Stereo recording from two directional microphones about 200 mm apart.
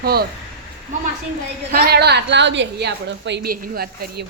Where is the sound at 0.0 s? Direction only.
50° right (ahead or behind).